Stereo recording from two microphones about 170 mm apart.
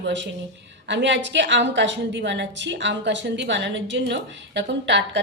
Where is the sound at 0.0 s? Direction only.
90° right.